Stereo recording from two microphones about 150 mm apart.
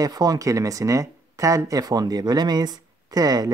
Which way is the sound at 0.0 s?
25° right (ahead or behind).